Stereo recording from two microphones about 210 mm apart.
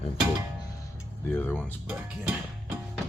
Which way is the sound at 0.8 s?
10° left (ahead or behind).